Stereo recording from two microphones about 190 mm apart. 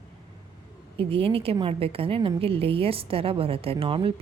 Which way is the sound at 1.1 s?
30° right (ahead or behind).